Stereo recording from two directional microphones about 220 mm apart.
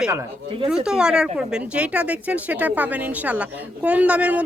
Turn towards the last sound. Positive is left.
turn(degrees=-5)  # may be behind; listen again after turning